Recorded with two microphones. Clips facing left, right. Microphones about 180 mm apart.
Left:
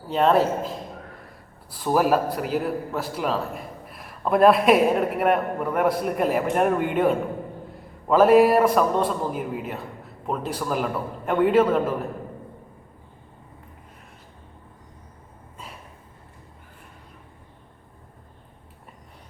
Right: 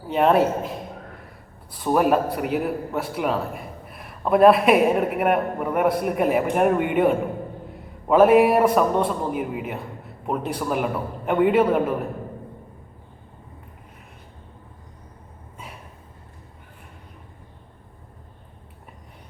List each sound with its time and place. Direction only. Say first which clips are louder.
0.1 s a man's voice: right 1 dB; 10° right (ahead or behind)
0.3 s a man's voice: right 1 dB; 65° right (ahead or behind)
1.8 s a man's voice: right 1 dB; centre (ahead or behind)